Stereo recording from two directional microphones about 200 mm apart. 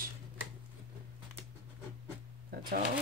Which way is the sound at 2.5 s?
45° right (ahead or behind).